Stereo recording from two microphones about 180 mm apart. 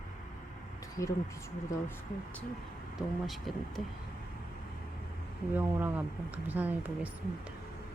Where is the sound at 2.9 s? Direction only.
Centre (ahead or behind).